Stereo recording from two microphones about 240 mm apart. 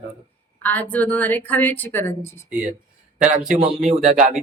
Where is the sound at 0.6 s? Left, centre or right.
Centre.